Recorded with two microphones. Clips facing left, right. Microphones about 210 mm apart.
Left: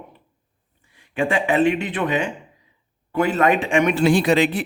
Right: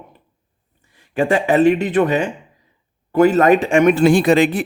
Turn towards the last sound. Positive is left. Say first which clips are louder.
# right 4 dB
turn(degrees=-45)  # may be behind; listen again after turning